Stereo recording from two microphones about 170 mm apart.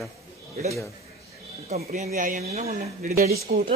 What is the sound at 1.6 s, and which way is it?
Speech, 45° right (ahead or behind).